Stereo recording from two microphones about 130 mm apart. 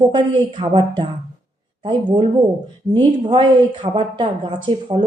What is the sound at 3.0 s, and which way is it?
Speech, 35° right (ahead or behind).